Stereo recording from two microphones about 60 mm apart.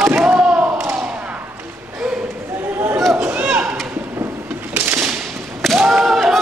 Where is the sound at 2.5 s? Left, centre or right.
Right.